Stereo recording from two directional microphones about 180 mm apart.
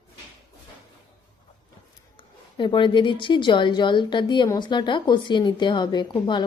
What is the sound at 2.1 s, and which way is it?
A woman's voice, 25° left (ahead or behind).